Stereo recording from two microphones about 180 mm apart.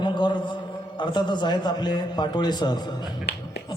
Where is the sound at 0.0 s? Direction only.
25° left (ahead or behind).